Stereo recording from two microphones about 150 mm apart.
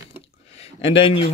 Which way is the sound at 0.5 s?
40° left (ahead or behind).